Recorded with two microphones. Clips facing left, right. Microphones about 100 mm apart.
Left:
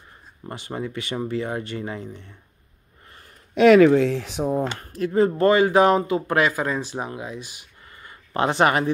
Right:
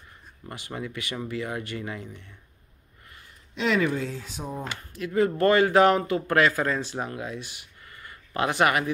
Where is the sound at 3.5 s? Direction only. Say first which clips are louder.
Left 12 dB; 65° left (ahead or behind); by 4.6 s 85° left.